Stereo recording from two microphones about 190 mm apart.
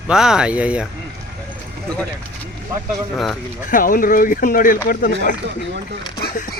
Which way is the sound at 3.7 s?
45° left (ahead or behind).